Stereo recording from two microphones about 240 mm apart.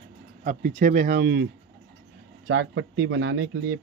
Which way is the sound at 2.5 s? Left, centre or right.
Right.